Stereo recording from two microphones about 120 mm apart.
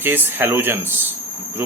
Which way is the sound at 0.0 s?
15° right (ahead or behind).